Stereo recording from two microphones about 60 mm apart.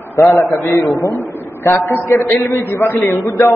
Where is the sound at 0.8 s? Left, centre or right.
Left.